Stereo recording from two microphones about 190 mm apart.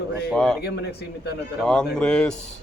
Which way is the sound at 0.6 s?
60° left (ahead or behind).